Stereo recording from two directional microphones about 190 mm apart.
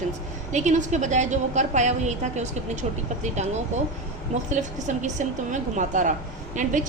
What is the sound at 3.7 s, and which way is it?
A woman's voice, 40° right (ahead or behind).